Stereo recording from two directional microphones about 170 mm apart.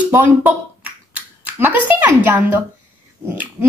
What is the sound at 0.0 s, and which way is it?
Finger snapping, 10° right (ahead or behind).